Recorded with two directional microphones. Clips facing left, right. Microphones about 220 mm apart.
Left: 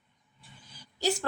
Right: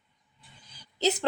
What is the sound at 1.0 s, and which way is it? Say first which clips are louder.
Speech: right 3 dB; 20° right (ahead or behind).